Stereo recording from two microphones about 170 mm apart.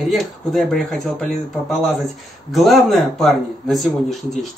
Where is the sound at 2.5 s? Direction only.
Centre (ahead or behind).